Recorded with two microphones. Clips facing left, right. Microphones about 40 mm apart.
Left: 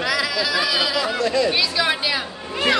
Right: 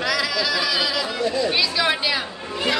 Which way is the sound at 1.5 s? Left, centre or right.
Centre.